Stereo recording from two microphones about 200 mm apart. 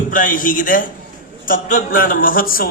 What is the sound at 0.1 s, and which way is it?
A man's voice, 40° left (ahead or behind).